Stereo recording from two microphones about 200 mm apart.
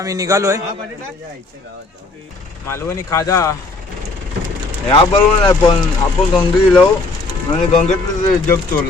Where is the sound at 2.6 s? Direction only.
15° left (ahead or behind).